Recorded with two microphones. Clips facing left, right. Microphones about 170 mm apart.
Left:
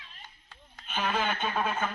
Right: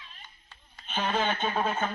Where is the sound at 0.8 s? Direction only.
25° right (ahead or behind).